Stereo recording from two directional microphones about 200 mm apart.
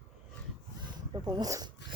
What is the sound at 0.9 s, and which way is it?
Speech, 20° right (ahead or behind).